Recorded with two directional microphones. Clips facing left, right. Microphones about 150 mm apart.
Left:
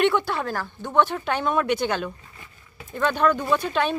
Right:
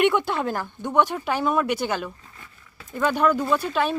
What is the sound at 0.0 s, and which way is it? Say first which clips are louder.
Speech: right 1 dB; 15° right (ahead or behind).